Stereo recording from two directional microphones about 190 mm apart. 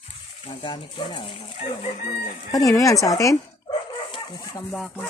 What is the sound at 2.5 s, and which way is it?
Speech, 15° left (ahead or behind).